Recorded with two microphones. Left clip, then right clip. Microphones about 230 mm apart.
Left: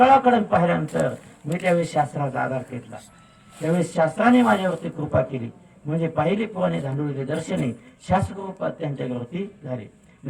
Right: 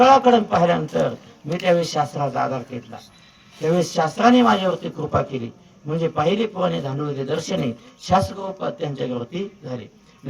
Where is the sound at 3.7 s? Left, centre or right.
Centre.